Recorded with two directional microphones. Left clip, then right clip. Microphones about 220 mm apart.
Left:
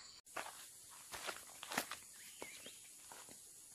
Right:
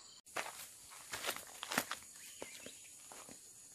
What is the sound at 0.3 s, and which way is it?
Walk, 40° right (ahead or behind).